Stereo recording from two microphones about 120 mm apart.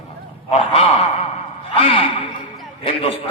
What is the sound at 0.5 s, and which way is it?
A man's voice, 40° left (ahead or behind).